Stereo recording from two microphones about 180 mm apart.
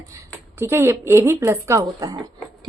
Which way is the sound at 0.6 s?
15° right (ahead or behind).